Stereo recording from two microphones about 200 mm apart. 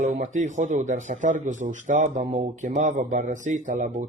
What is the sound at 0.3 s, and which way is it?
A man's voice, 35° right (ahead or behind).